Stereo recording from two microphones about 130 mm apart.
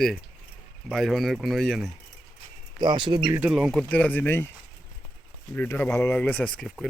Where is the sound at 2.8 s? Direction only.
35° right (ahead or behind).